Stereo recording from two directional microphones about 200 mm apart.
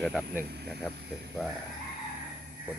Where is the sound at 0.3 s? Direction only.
55° right (ahead or behind).